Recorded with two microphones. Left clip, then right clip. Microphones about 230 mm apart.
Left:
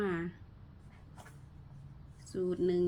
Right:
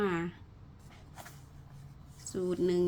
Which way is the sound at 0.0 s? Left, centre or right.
Centre.